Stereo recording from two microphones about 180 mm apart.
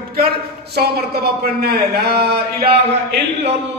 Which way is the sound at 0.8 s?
60° right (ahead or behind).